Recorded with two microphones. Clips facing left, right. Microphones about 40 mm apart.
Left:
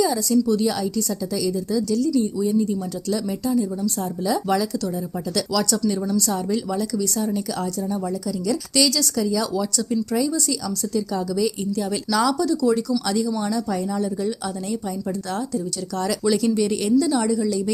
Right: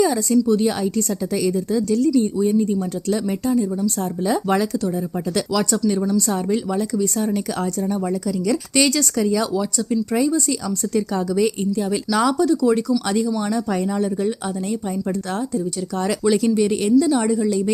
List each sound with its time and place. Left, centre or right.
0.0 s a woman's voice: right
5.9 s a woman's voice: centre
6.1 s a woman's voice: right
8.7 s a woman's voice: right
10.9 s a woman's voice: right
11.8 s a woman's voice: right
13.5 s a woman's voice: right
15.5 s speech: right
17.3 s speech: right